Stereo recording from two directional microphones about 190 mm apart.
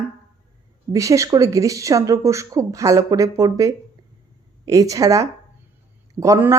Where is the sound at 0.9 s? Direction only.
15° right (ahead or behind).